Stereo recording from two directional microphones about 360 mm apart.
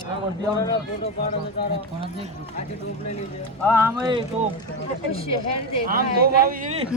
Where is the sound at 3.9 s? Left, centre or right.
Centre.